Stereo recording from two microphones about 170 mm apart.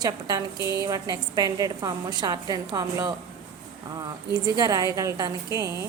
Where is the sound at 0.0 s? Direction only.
25° right (ahead or behind).